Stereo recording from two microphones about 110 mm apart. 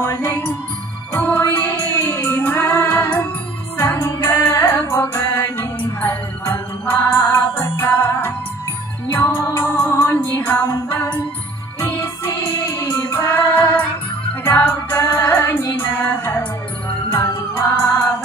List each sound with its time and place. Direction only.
0.0 s music: 25° left (ahead or behind)
12.3 s music: 20° left (ahead or behind)